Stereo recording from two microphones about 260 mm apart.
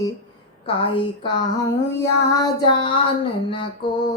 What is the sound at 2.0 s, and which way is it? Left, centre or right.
Child singing, centre.